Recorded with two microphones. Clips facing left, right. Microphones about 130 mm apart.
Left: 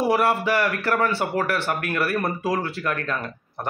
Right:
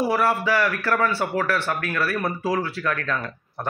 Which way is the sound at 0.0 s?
20° left (ahead or behind).